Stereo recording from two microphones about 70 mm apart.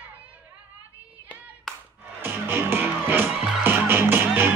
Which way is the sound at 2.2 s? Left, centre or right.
Right.